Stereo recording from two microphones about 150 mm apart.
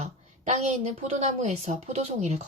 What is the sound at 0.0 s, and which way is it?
A woman's voice, 50° right (ahead or behind).